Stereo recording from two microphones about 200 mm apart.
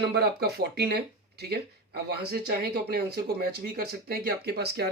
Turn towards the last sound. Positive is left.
turn(degrees=-55)  # may be behind; listen again after turning